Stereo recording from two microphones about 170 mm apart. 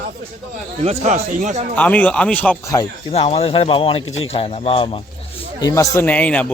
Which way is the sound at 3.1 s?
35° left (ahead or behind).